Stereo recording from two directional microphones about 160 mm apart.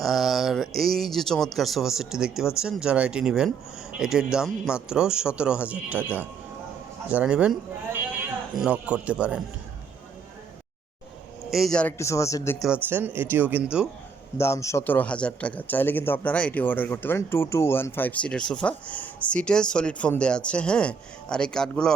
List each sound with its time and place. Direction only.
0.0 s speech: centre (ahead or behind)
8.5 s speech: 5° right (ahead or behind)
11.5 s speech: 5° left (ahead or behind)
11.9 s speech: 20° left (ahead or behind)
12.5 s speech: 5° right (ahead or behind)
14.3 s speech: 20° left (ahead or behind)